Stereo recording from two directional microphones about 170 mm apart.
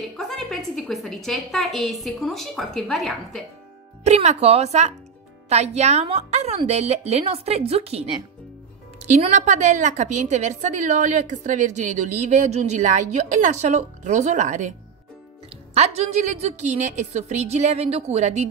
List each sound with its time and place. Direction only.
0.2 s a woman's voice: centre (ahead or behind)
4.0 s a woman's voice: 40° right (ahead or behind)
15.7 s a woman's voice: 40° right (ahead or behind)